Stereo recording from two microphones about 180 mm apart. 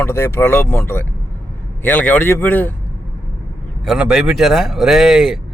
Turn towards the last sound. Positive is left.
turn(degrees=0)  # may be behind; listen again after turning